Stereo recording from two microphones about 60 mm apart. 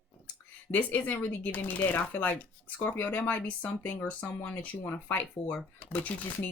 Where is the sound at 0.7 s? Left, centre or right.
Left.